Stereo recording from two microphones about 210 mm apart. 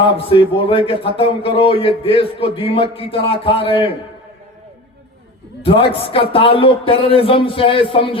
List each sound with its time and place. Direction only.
0.3 s speech: 25° left (ahead or behind)
5.6 s speech: 25° left (ahead or behind)